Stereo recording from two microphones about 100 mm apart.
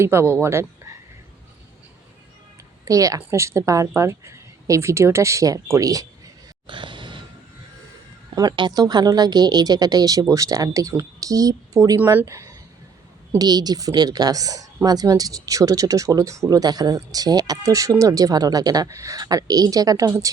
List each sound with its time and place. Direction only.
0.0 s speech: 25° right (ahead or behind)
2.8 s speech: 35° right (ahead or behind)
6.7 s gasp: 55° right (ahead or behind)
8.4 s speech: 45° right (ahead or behind)
13.4 s speech: 40° right (ahead or behind)